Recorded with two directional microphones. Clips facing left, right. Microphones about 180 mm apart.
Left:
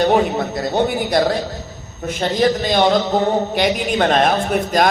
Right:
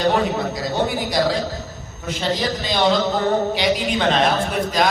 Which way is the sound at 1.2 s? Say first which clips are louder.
Left 2 dB; 60° left (ahead or behind).